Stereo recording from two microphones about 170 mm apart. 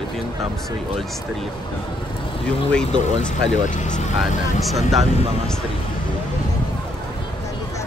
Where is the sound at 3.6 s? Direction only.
45° left (ahead or behind).